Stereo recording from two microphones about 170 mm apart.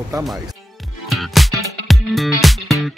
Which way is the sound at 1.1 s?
Centre (ahead or behind).